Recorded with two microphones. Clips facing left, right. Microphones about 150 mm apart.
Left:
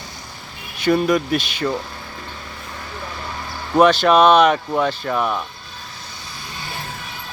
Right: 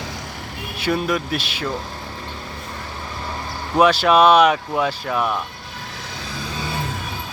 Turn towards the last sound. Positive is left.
turn(degrees=0)  # may be behind; listen again after turning